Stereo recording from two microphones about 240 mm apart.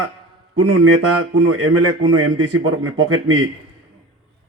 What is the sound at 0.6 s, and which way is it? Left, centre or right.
A man's voice, right.